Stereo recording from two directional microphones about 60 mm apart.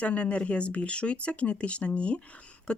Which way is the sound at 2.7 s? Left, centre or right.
Centre.